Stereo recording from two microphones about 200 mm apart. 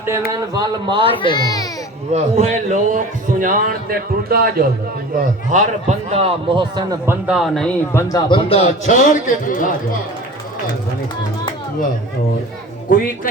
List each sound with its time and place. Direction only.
0.3 s speech: 20° right (ahead or behind)
1.2 s a child's voice: 20° left (ahead or behind)
2.1 s a man's voice: 35° right (ahead or behind)
6.1 s speech: 30° right (ahead or behind)
7.0 s speech: 10° right (ahead or behind)
7.3 s speech: centre (ahead or behind)
7.9 s speech: 15° left (ahead or behind)
8.4 s a man's voice: 30° left (ahead or behind)
12.9 s speech: 45° left (ahead or behind)